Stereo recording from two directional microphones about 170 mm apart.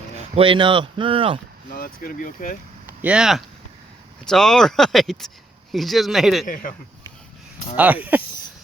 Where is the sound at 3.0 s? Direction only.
5° right (ahead or behind).